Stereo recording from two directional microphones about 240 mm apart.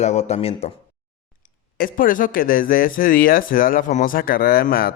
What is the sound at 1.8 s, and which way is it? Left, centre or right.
A man's voice, left.